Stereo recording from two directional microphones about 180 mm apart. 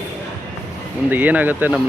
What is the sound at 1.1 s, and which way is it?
Speech, 10° right (ahead or behind).